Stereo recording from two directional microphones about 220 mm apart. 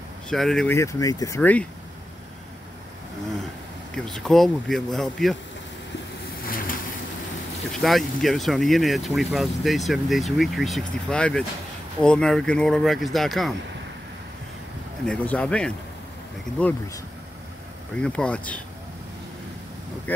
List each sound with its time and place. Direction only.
0.3 s speech: centre (ahead or behind)
0.7 s speech: 15° left (ahead or behind)
3.9 s speech: 5° left (ahead or behind)
6.4 s vehicle: 40° left (ahead or behind)
7.8 s speech: centre (ahead or behind)
15.0 s speech: 5° left (ahead or behind)